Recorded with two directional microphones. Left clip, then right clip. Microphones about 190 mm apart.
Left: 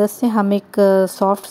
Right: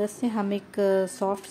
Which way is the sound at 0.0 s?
35° left (ahead or behind).